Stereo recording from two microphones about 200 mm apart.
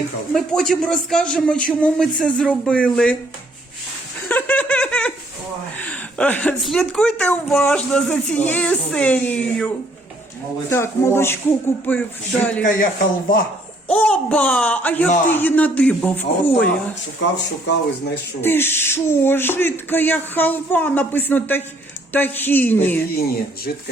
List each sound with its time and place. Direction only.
0.3 s a woman's voice: centre (ahead or behind)
4.3 s a woman's voice: 10° left (ahead or behind)
10.7 s speech: 10° left (ahead or behind)
13.8 s speech: 5° left (ahead or behind)
17.3 s speech: 60° left (ahead or behind)
18.4 s speech: 10° left (ahead or behind)
23.1 s speech: 50° left (ahead or behind)